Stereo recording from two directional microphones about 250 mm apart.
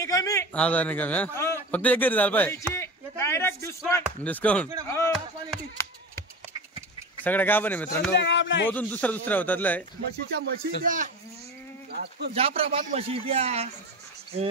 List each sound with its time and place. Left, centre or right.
0.0 s a man's voice: centre
7.2 s a man's voice: centre
8.2 s speech: left
8.6 s a man's voice: centre
10.4 s speech: right
12.4 s a man's voice: right